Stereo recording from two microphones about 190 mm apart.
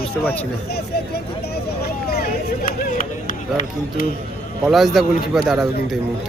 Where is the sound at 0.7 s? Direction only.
55° left (ahead or behind).